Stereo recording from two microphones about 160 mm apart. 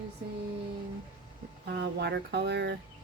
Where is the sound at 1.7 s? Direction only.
90° right.